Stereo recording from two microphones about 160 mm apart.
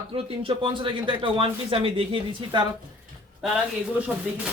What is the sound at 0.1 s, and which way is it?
Speech, 35° right (ahead or behind).